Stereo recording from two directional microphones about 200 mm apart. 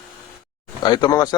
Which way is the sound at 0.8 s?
20° left (ahead or behind).